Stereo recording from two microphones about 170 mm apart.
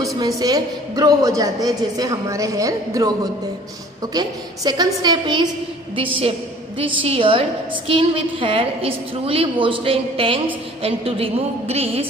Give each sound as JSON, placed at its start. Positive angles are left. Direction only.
{"t": 0.2, "sound": "a woman's voice", "side_deg": -20}